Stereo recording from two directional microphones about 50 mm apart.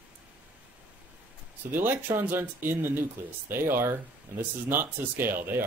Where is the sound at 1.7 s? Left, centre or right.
Right.